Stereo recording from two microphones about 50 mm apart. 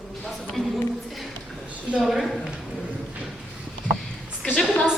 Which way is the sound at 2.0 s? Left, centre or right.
Centre.